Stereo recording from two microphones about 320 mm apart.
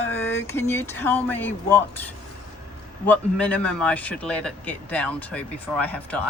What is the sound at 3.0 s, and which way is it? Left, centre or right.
A man's voice, centre.